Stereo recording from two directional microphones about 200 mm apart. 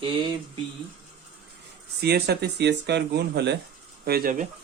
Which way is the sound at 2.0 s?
55° right (ahead or behind).